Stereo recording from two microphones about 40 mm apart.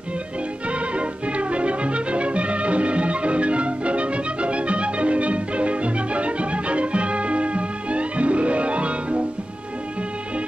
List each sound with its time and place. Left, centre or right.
0.7 s music: right